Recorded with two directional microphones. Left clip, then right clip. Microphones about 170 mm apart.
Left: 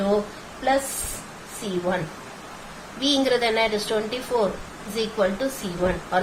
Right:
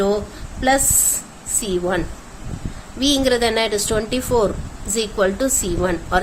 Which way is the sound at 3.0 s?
50° right (ahead or behind).